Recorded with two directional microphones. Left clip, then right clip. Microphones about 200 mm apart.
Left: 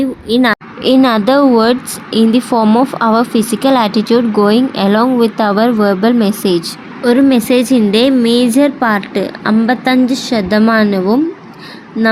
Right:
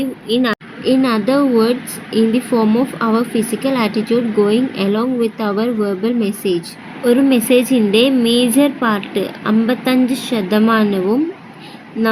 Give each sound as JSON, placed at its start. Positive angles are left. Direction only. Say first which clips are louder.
{"t": 0.3, "sound": "a woman's voice", "louder": "left 5 dB", "side_deg": 30}
{"t": 0.8, "sound": "a woman's voice", "louder": "left 5 dB", "side_deg": 45}
{"t": 7.0, "sound": "a woman's voice", "louder": "left 3 dB", "side_deg": 25}